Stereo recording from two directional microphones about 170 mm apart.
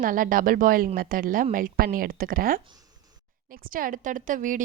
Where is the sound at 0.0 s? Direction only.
55° right (ahead or behind).